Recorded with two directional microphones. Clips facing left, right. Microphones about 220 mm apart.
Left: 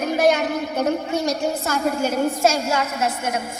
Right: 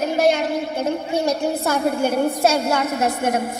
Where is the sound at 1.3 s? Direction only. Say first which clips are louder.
Right 2 dB; 60° right (ahead or behind).